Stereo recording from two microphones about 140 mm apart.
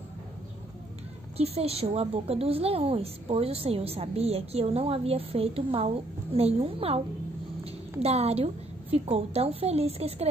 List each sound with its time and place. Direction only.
1.3 s a woman's voice: 45° right (ahead or behind)
8.0 s a woman's voice: 50° right (ahead or behind)